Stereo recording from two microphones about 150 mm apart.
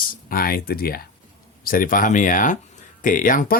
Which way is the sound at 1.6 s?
70° left (ahead or behind).